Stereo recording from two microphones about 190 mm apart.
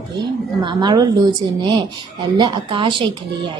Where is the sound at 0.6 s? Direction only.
25° right (ahead or behind).